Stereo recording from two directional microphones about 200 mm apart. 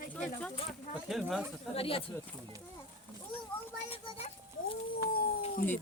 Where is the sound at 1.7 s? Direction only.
30° left (ahead or behind).